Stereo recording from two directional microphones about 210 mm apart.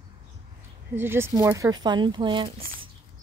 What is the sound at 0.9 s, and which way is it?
Speech, 10° right (ahead or behind).